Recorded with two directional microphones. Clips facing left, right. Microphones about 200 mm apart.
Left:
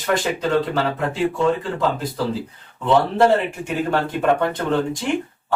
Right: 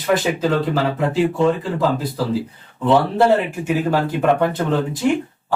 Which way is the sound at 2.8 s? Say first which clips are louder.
Right 1 dB; 5° right (ahead or behind).